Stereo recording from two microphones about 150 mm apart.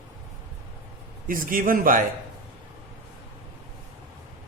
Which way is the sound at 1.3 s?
65° right (ahead or behind).